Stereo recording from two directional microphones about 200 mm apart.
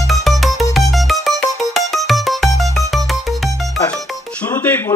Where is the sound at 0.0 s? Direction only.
Centre (ahead or behind).